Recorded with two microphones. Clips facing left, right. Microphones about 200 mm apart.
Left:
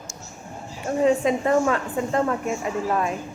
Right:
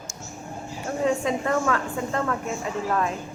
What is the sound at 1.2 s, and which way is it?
A woman's voice, 20° left (ahead or behind).